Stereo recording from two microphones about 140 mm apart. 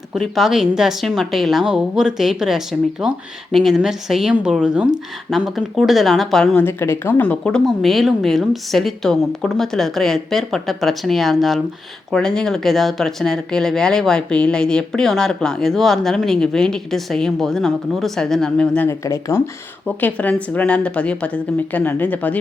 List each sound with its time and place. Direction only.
0.1 s speech: centre (ahead or behind)
18.9 s a woman's voice: 20° left (ahead or behind)